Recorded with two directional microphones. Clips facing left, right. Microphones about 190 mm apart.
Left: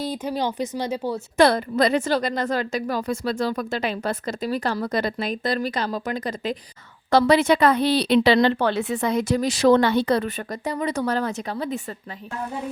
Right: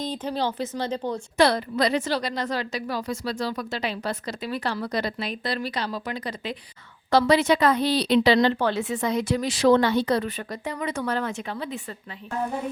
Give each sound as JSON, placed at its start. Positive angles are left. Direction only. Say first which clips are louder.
{"t": 0.0, "sound": "speech", "louder": "left 2 dB", "side_deg": 10}
{"t": 1.4, "sound": "a woman's voice", "louder": "left 3 dB", "side_deg": 50}